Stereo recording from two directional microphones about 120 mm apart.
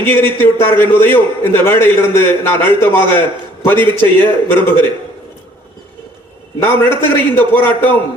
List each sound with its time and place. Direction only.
0.0 s a man's voice: 15° left (ahead or behind)
6.8 s a man's voice: 15° left (ahead or behind)